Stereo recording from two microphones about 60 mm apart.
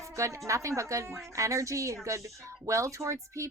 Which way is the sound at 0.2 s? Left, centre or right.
Right.